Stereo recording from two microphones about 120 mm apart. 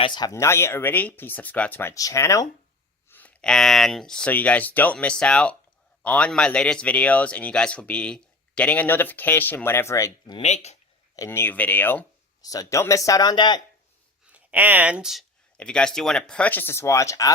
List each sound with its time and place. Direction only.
0.0 s speech: 35° left (ahead or behind)
3.1 s a man's voice: 15° left (ahead or behind)
10.4 s speech: 65° left (ahead or behind)
11.3 s a man's voice: 15° left (ahead or behind)
12.4 s speech: 30° left (ahead or behind)
14.3 s speech: 10° right (ahead or behind)
15.5 s a man's voice: 10° left (ahead or behind); by 17.3 s 25° left (ahead or behind)